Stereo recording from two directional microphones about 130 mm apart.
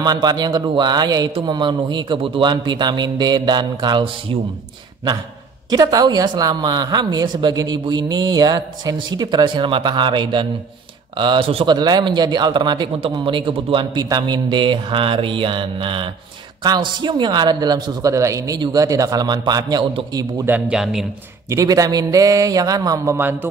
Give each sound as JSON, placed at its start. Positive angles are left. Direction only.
{"t": 0.0, "sound": "a man's voice", "side_deg": -30}
{"t": 5.7, "sound": "a man's voice", "side_deg": -30}
{"t": 20.4, "sound": "a man's voice", "side_deg": -10}
{"t": 21.5, "sound": "a man's voice", "side_deg": -25}
{"t": 23.1, "sound": "a man's voice", "side_deg": -15}